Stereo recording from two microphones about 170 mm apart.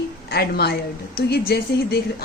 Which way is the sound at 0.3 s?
70° left (ahead or behind).